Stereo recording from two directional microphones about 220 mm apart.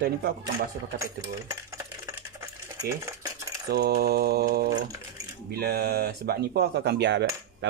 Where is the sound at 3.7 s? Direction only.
45° right (ahead or behind).